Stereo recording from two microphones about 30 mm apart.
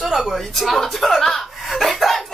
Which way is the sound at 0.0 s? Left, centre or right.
Centre.